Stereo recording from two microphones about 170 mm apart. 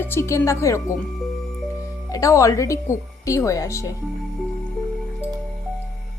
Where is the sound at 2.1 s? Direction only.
20° left (ahead or behind).